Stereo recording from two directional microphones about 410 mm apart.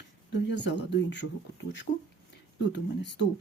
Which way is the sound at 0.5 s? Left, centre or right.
Left.